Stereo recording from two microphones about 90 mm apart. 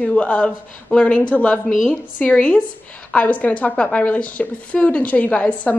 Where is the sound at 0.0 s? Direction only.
15° left (ahead or behind).